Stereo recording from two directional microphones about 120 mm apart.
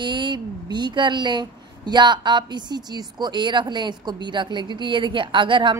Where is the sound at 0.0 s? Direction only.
40° right (ahead or behind).